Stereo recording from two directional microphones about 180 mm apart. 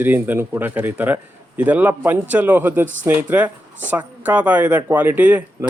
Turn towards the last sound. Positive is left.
turn(degrees=-15)  # may be behind; listen again after turning